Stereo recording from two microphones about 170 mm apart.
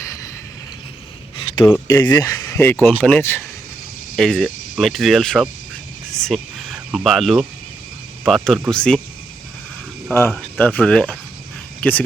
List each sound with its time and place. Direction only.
1.6 s speech: 20° left (ahead or behind)
10.3 s speech: 10° left (ahead or behind)